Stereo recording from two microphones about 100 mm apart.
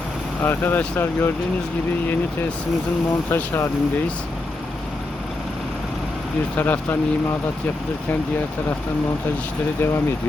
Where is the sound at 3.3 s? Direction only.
25° left (ahead or behind).